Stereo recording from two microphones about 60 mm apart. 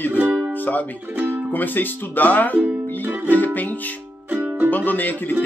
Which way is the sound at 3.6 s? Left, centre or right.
Left.